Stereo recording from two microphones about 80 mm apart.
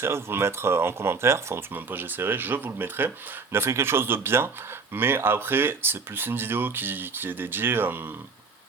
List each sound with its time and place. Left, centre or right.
0.0 s speech: right